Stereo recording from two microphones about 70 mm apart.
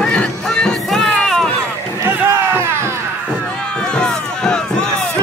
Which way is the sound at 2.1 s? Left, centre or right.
Right.